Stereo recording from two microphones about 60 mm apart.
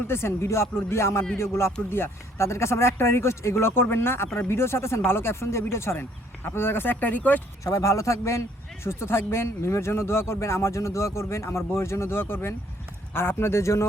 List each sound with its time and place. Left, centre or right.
0.1 s speech: left
6.0 s speech: left
7.6 s a man's voice: left